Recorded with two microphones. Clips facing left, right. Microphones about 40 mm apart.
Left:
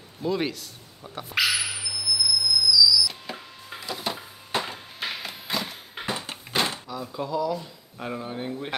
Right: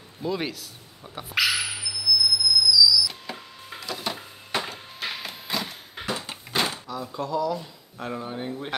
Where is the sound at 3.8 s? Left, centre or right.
Centre.